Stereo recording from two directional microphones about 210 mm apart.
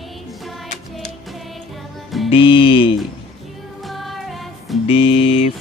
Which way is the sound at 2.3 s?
25° left (ahead or behind).